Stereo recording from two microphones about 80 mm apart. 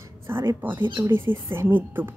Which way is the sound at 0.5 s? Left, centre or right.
Right.